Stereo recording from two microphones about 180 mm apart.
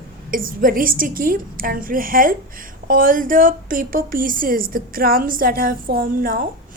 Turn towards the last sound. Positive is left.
turn(degrees=-55)  # may be behind; listen again after turning